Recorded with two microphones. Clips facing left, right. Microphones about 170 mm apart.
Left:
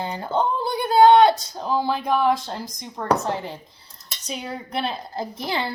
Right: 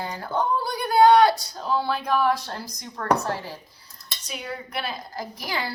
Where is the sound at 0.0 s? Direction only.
20° left (ahead or behind).